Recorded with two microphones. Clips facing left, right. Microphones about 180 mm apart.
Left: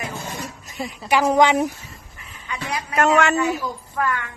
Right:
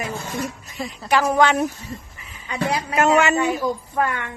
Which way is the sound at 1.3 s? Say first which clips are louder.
Left 3 dB; 15° left (ahead or behind).